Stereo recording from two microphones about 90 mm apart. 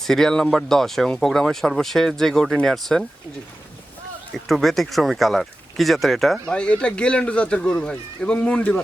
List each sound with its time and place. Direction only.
0.0 s speech: 5° left (ahead or behind)
4.4 s speech: centre (ahead or behind)
6.5 s speech: 10° left (ahead or behind)